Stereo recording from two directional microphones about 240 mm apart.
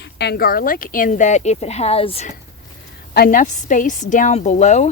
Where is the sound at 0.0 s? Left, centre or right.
Left.